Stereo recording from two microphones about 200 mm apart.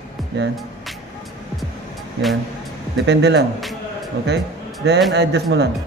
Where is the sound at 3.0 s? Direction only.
60° right (ahead or behind).